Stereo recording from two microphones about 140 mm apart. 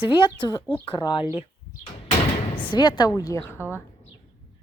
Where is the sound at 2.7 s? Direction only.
30° left (ahead or behind).